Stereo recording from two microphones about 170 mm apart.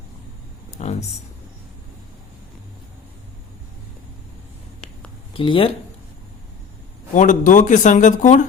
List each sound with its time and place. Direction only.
0.8 s speech: 40° left (ahead or behind)
5.4 s speech: 30° left (ahead or behind)
7.1 s speech: 50° left (ahead or behind)